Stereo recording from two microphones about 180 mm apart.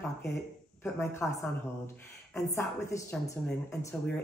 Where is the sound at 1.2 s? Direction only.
Centre (ahead or behind).